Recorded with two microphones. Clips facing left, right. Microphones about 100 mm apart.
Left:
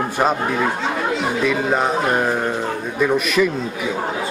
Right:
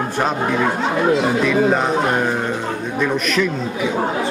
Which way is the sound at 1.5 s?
Centre (ahead or behind).